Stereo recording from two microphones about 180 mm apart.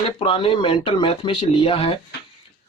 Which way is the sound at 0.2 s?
30° left (ahead or behind).